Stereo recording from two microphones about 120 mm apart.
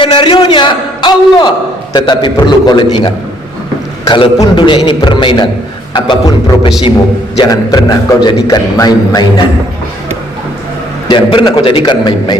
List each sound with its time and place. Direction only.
0.0 s a man's voice: 45° left (ahead or behind)
11.1 s a man's voice: 45° left (ahead or behind)